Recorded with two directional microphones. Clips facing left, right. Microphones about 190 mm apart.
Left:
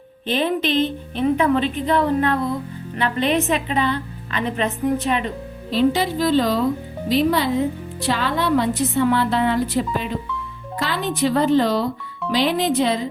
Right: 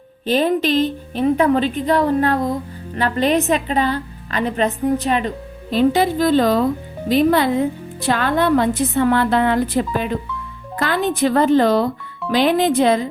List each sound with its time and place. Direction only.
0.3 s a woman's voice: 40° right (ahead or behind)
5.7 s a woman's voice: 50° right (ahead or behind)